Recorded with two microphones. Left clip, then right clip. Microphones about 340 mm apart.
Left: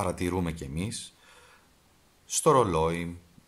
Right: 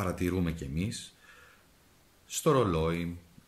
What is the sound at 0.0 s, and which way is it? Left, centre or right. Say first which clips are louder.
Speech: left 3 dB; centre.